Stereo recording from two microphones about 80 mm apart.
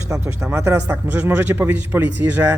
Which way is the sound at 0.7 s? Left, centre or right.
Right.